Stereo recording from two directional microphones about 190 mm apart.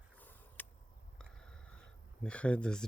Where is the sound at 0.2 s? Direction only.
10° left (ahead or behind).